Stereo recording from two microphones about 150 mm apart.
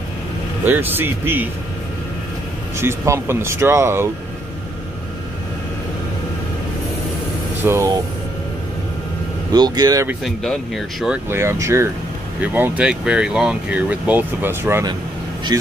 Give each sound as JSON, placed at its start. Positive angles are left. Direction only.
{"t": 0.7, "sound": "speech", "side_deg": -15}
{"t": 2.8, "sound": "speech", "side_deg": -15}
{"t": 7.6, "sound": "speech", "side_deg": -15}
{"t": 9.5, "sound": "speech", "side_deg": -25}
{"t": 10.2, "sound": "speech", "side_deg": 0}
{"t": 11.2, "sound": "speech", "side_deg": -20}